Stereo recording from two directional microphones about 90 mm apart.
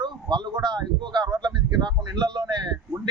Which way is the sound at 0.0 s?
55° right (ahead or behind).